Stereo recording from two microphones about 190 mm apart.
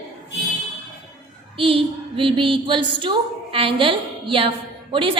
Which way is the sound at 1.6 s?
30° right (ahead or behind).